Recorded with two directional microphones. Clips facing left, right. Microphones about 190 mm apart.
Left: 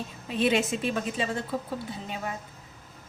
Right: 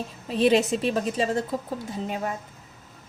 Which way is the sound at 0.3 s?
35° right (ahead or behind).